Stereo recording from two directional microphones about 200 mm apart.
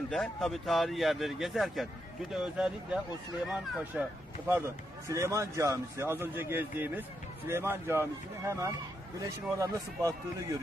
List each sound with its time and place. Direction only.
0.1 s a man's voice: 5° left (ahead or behind); by 10.2 s 15° right (ahead or behind)